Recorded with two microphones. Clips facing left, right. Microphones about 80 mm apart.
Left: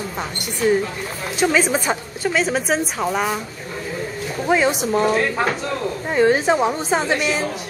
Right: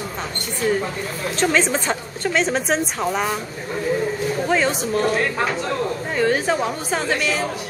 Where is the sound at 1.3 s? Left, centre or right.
Centre.